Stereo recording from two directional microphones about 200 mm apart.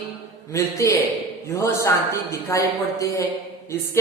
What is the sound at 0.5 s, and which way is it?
Speech, 15° left (ahead or behind).